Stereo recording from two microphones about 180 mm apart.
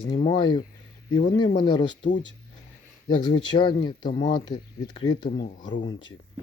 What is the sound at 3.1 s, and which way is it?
Speech, 25° left (ahead or behind).